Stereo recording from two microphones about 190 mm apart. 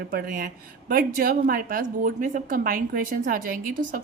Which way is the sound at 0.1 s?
50° right (ahead or behind).